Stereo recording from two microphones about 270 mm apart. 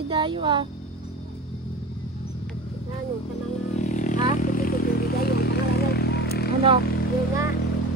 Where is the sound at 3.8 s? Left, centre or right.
Left.